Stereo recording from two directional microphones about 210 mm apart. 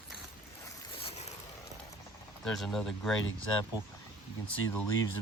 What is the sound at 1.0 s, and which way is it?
Vehicle, 30° left (ahead or behind).